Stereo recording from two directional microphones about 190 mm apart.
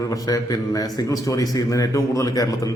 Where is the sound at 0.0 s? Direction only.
20° left (ahead or behind).